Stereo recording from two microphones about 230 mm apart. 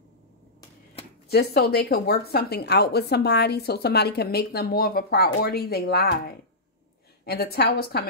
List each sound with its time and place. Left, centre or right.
1.3 s a woman's voice: left